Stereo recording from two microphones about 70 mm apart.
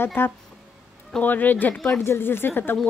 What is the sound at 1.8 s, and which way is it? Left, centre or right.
Speech, centre.